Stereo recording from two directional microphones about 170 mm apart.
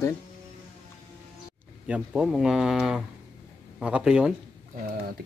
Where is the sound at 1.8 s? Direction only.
5° right (ahead or behind).